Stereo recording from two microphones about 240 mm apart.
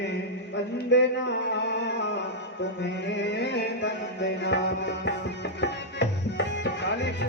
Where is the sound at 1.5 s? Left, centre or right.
Left.